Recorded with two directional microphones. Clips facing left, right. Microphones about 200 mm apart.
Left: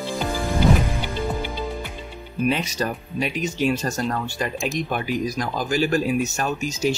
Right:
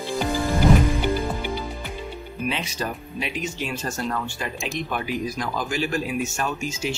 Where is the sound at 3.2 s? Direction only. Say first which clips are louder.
Left 7 dB; 40° left (ahead or behind).